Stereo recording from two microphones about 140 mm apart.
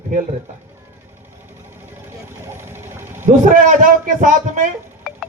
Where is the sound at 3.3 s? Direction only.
70° right (ahead or behind).